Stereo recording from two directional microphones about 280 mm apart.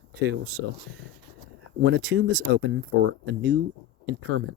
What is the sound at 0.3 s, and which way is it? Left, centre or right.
Speech, right.